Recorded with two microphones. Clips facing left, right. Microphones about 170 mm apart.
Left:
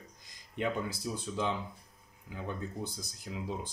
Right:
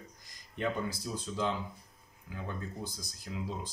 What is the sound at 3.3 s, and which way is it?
Speech, 10° left (ahead or behind).